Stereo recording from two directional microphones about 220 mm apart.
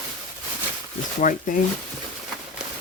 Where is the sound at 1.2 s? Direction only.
35° left (ahead or behind).